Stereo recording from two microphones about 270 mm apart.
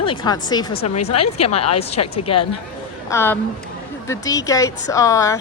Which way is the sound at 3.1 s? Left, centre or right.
Centre.